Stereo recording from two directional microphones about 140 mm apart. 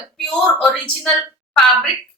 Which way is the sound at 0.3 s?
5° left (ahead or behind).